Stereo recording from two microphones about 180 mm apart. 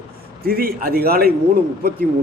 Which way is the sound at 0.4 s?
55° right (ahead or behind).